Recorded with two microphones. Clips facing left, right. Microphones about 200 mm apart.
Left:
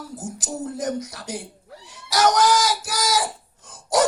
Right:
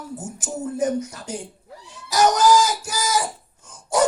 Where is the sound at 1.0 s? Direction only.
80° left.